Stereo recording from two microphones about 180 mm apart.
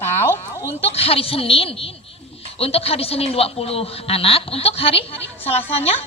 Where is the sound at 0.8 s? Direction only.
35° left (ahead or behind).